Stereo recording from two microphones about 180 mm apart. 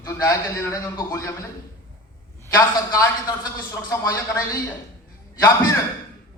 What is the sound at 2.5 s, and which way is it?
A man's voice, 15° left (ahead or behind).